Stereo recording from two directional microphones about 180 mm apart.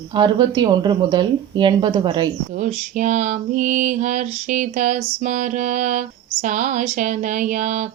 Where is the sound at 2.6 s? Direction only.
45° right (ahead or behind).